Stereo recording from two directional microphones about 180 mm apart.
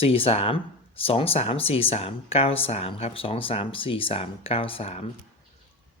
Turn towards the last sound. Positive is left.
turn(degrees=35)  # may be behind; listen again after turning